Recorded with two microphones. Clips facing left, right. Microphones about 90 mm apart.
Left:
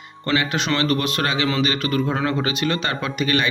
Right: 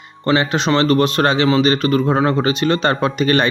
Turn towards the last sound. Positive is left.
turn(degrees=-40)  # may be behind; listen again after turning